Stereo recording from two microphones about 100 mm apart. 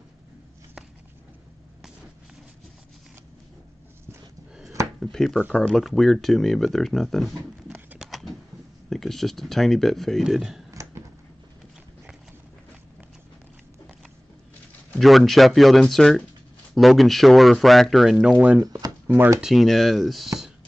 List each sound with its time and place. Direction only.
5.0 s speech: 5° left (ahead or behind)
8.0 s a sound: centre (ahead or behind)
8.9 s speech: 5° left (ahead or behind)
10.7 s a sound: 30° right (ahead or behind)
15.0 s speech: centre (ahead or behind)
18.6 s speech: 35° right (ahead or behind)
19.0 s speech: 20° right (ahead or behind)
19.4 s speech: centre (ahead or behind)